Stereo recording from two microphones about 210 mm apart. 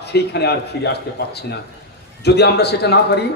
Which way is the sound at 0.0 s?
50° left (ahead or behind).